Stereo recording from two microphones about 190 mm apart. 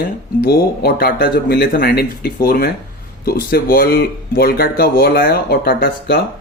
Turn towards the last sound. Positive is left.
turn(degrees=55)  # may be behind; listen again after turning